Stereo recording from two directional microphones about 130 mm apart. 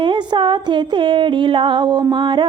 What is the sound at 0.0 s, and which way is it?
Speech, 40° right (ahead or behind).